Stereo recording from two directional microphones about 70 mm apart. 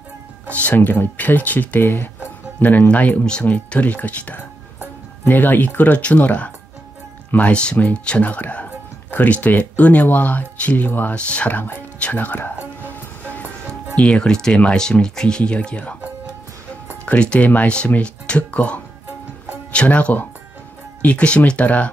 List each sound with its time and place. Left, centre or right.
0.5 s speech: left
12.8 s music: left
13.9 s speech: centre
17.0 s speech: centre